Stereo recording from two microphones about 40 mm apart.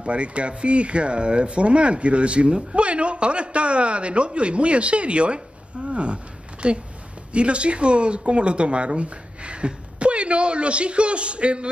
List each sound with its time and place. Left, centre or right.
0.0 s speech: right